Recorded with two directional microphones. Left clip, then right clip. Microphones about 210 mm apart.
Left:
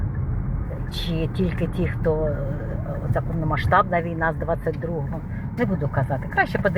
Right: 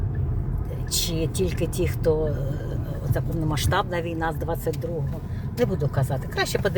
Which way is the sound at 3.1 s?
20° right (ahead or behind).